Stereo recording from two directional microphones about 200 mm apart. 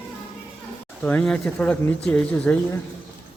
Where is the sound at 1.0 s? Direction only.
5° left (ahead or behind).